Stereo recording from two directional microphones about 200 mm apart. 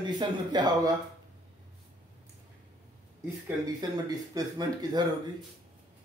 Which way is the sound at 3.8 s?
20° right (ahead or behind).